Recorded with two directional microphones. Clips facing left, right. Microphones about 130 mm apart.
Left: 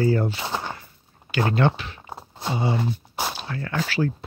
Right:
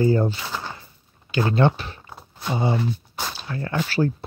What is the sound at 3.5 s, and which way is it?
Speech, 30° right (ahead or behind).